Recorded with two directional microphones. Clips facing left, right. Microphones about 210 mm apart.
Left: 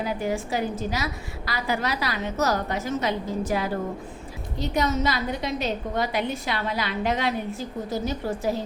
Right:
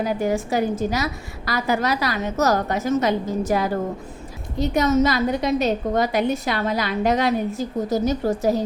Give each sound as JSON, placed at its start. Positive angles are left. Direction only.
{"t": 0.0, "sound": "a woman's voice", "side_deg": -45}
{"t": 4.7, "sound": "a woman's voice", "side_deg": -45}